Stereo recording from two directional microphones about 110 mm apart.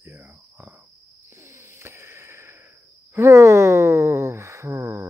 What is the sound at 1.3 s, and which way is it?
Wheeze, 25° right (ahead or behind).